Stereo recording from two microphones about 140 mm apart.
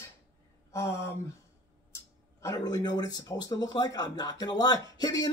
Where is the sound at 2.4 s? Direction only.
25° left (ahead or behind).